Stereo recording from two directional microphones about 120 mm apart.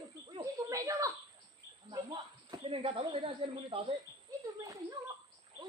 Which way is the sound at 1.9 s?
40° right (ahead or behind).